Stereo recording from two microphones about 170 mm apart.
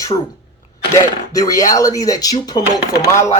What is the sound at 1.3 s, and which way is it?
Speech, 20° left (ahead or behind).